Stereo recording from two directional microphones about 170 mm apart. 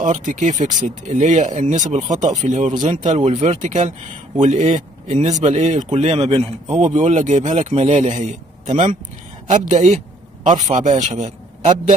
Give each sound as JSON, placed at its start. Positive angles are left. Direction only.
{"t": 0.0, "sound": "a man's voice", "side_deg": -50}